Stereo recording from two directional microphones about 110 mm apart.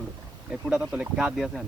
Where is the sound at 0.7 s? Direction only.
5° right (ahead or behind).